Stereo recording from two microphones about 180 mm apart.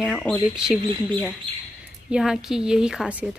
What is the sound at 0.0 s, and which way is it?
Speech, 5° left (ahead or behind).